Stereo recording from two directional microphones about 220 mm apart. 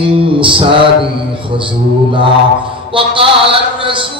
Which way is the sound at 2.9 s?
25° right (ahead or behind).